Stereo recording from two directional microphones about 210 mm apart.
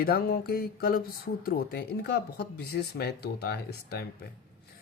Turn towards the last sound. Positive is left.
turn(degrees=50)  # may be behind; listen again after turning